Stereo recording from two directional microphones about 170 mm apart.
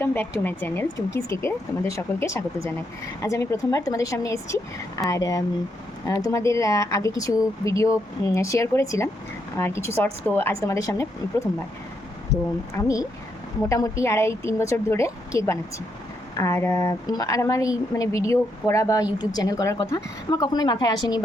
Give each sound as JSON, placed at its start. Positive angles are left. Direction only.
{"t": 0.0, "sound": "speech", "side_deg": 10}
{"t": 12.8, "sound": "speech", "side_deg": 20}